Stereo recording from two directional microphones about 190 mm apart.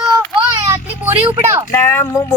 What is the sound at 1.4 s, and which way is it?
Speech, 15° right (ahead or behind).